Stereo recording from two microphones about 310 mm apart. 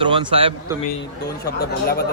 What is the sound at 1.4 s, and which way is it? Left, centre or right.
Speech, left.